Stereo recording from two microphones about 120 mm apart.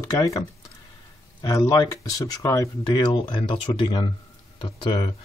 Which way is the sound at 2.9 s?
40° left (ahead or behind).